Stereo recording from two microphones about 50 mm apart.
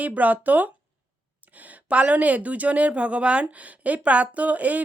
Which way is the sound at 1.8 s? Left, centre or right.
Right.